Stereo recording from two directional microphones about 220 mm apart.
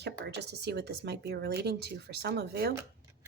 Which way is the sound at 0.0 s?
50° right (ahead or behind).